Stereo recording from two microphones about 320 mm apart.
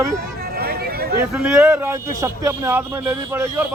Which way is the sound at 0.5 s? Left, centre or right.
Right.